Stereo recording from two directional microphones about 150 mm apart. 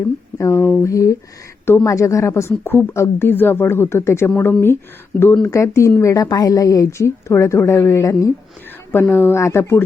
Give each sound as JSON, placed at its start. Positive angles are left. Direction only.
{"t": 0.3, "sound": "a woman's voice", "side_deg": 20}